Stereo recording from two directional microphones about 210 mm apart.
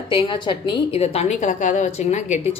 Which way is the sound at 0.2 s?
20° left (ahead or behind).